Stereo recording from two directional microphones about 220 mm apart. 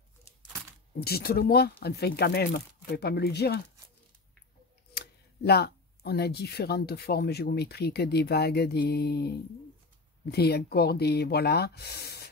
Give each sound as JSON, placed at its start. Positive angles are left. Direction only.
{"t": 1.0, "sound": "speech", "side_deg": 45}
{"t": 5.5, "sound": "speech", "side_deg": 45}
{"t": 10.3, "sound": "speech", "side_deg": 45}